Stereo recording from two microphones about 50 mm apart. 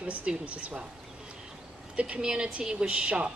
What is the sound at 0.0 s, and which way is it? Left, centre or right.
Speech, right.